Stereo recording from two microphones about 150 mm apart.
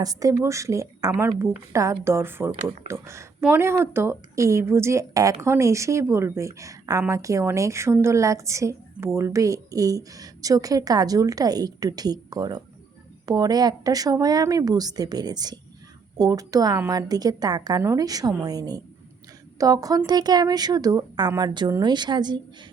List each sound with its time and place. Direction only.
0.0 s a woman's voice: 25° right (ahead or behind)